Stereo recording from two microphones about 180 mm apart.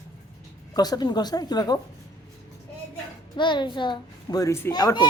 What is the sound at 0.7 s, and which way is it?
Speech, 20° left (ahead or behind).